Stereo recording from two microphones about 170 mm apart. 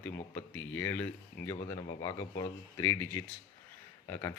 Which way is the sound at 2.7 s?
15° left (ahead or behind).